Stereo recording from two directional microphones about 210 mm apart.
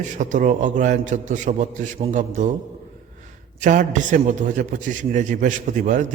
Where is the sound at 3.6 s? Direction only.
35° right (ahead or behind).